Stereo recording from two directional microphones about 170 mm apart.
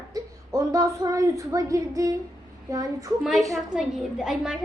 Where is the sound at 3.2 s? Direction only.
Centre (ahead or behind).